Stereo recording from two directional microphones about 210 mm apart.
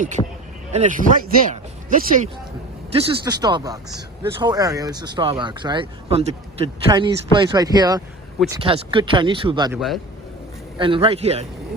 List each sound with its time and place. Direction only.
0.2 s speech: 20° left (ahead or behind)
0.7 s speech: 35° right (ahead or behind)
2.9 s speech: 20° right (ahead or behind)
9.7 s a man's voice: centre (ahead or behind)
10.8 s speech: 25° right (ahead or behind)